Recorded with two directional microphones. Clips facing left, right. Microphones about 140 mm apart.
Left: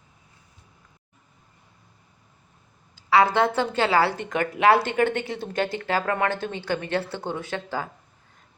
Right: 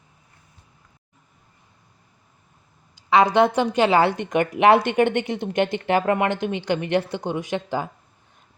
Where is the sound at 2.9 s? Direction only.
15° right (ahead or behind).